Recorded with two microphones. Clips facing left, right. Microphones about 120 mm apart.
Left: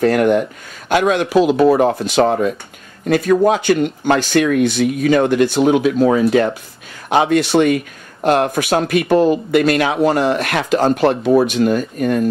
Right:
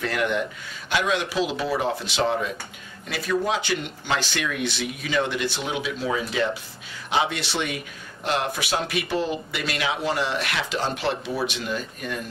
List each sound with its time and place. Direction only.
0.0 s speech: 45° left (ahead or behind)